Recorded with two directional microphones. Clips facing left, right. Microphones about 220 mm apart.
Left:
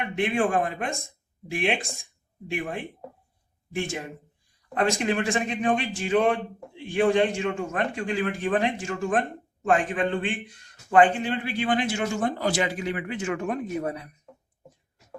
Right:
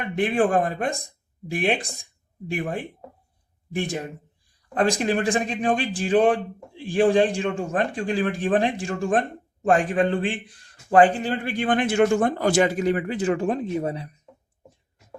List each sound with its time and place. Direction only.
0.2 s a man's voice: 35° right (ahead or behind)
4.9 s a man's voice: 35° right (ahead or behind)